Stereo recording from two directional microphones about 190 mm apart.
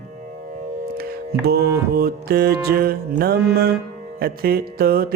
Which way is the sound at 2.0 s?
55° right (ahead or behind).